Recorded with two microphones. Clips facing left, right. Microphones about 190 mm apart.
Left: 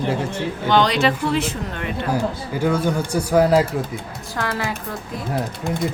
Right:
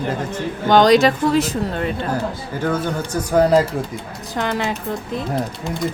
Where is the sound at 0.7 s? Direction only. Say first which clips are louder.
Right 6 dB; 40° right (ahead or behind).